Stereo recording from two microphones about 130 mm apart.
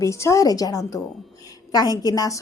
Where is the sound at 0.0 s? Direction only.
25° left (ahead or behind).